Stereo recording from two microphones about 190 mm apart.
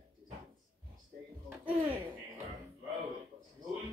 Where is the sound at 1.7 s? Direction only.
10° right (ahead or behind).